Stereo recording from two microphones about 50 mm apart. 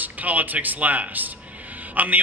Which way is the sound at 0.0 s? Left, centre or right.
Right.